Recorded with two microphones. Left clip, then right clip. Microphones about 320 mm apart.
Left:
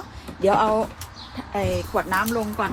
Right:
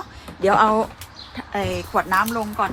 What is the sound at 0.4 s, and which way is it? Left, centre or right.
Speech, right.